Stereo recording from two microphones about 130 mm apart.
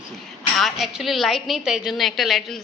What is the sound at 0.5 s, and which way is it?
A woman's voice, centre (ahead or behind).